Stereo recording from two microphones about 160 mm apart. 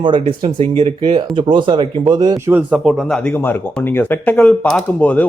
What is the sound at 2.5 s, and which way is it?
Speech, 5° right (ahead or behind).